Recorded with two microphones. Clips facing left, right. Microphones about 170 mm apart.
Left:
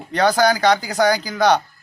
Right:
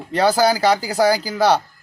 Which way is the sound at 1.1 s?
30° right (ahead or behind).